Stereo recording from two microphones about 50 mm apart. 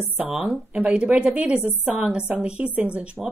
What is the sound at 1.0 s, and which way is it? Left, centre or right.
A woman's voice, right.